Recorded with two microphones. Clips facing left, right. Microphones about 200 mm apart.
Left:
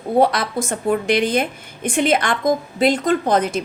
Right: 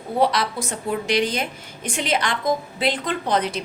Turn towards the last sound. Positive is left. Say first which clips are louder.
# left 5 dB
turn(degrees=45)  # may be behind; listen again after turning